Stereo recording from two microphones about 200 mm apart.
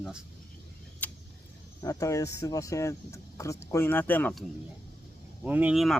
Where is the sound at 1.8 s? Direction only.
15° left (ahead or behind).